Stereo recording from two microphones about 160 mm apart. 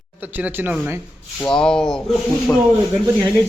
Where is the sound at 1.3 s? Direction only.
5° left (ahead or behind).